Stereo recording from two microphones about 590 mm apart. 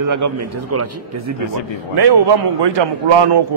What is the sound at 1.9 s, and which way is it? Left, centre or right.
A man's voice, right.